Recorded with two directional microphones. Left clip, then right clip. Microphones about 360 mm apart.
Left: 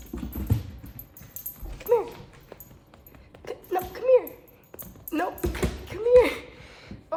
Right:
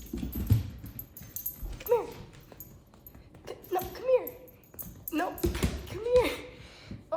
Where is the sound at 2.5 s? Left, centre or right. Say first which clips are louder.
Left 5 dB; left.